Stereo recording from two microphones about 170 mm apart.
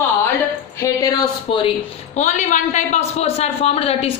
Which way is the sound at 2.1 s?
45° left (ahead or behind).